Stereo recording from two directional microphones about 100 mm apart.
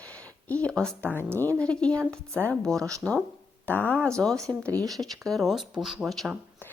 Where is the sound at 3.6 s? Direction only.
15° left (ahead or behind).